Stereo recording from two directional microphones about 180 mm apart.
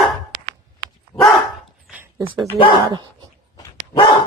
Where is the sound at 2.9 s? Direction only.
25° right (ahead or behind).